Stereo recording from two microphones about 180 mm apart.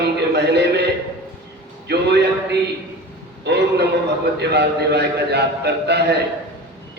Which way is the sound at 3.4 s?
70° right (ahead or behind).